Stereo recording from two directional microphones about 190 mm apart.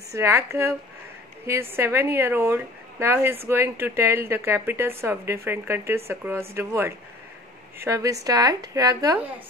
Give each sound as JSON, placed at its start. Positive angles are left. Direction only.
{"t": 0.1, "sound": "speech", "side_deg": -15}